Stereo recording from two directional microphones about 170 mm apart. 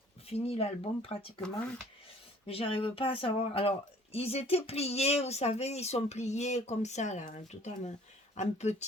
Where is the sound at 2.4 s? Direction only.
35° left (ahead or behind).